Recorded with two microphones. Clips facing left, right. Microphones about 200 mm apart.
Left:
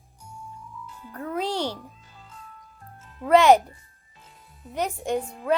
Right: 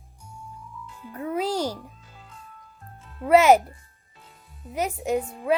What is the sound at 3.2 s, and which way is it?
Speech, 5° right (ahead or behind).